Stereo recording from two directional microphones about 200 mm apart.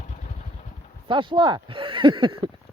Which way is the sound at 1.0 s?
25° right (ahead or behind).